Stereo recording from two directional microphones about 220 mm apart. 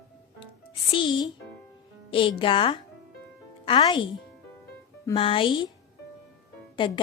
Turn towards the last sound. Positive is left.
turn(degrees=20)  # may be behind; listen again after turning